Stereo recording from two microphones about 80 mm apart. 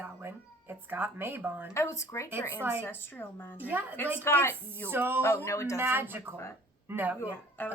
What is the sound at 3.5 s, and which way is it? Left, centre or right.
Speech, right.